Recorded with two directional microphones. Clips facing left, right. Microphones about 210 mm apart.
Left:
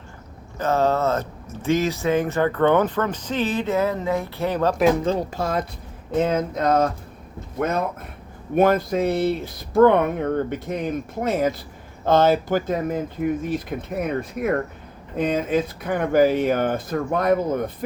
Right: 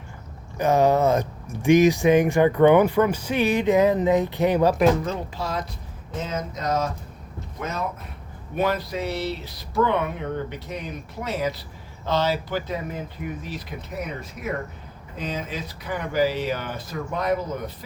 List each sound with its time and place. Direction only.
0.6 s speech: 15° right (ahead or behind)
5.0 s speech: 35° left (ahead or behind); by 5.6 s 50° left (ahead or behind)
6.1 s a sound: 55° left (ahead or behind)
8.5 s speech: 50° left (ahead or behind)